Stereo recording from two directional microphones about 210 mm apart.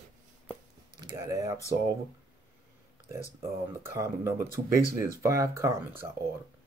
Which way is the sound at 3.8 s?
15° right (ahead or behind).